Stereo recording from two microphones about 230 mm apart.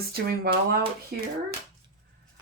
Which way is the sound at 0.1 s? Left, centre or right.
Right.